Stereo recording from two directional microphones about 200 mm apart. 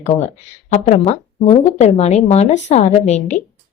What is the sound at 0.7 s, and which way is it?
Speech, 35° left (ahead or behind).